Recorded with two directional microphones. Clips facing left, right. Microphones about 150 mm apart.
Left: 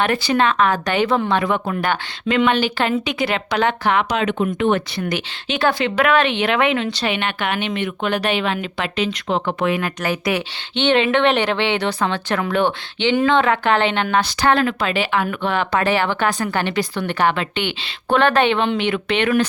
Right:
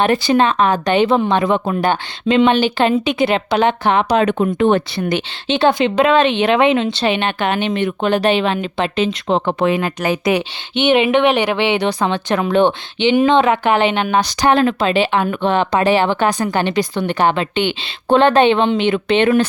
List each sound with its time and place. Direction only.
0.0 s a woman's voice: 20° right (ahead or behind)
4.2 s speech: 40° right (ahead or behind)
4.9 s a woman's voice: 25° right (ahead or behind)